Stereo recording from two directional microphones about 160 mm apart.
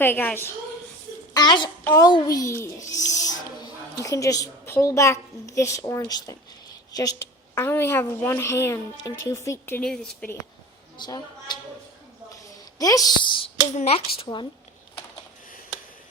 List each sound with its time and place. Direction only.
0.0 s speech: 10° left (ahead or behind)
1.3 s a child's voice: 25° left (ahead or behind); by 10.3 s 5° left (ahead or behind)
10.9 s a woman's voice: 25° left (ahead or behind)
12.8 s a woman's voice: 20° left (ahead or behind)